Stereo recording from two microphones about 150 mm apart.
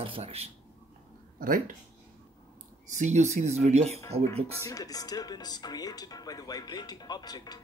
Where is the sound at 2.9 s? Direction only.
50° right (ahead or behind).